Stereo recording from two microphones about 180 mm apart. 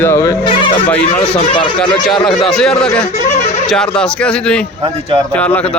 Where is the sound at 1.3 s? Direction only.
30° left (ahead or behind).